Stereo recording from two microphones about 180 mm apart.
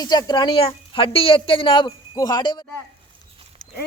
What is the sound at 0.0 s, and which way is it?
A woman's voice, 25° left (ahead or behind).